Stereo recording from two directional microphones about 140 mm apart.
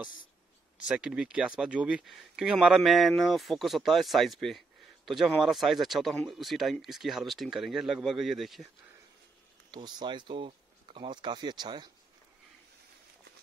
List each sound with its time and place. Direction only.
0.8 s speech: 10° right (ahead or behind)
9.7 s speech: 30° right (ahead or behind)